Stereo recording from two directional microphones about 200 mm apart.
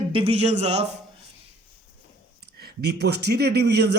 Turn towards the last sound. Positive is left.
turn(degrees=-55)  # may be behind; listen again after turning